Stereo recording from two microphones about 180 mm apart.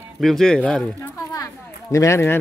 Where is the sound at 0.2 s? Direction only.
Centre (ahead or behind).